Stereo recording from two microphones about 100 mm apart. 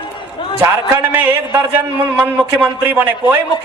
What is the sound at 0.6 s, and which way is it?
A woman's voice, 25° right (ahead or behind).